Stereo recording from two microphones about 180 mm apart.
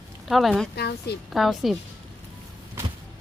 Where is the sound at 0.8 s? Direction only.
65° left (ahead or behind).